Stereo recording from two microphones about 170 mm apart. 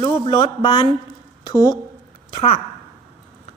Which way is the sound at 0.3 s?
30° left (ahead or behind).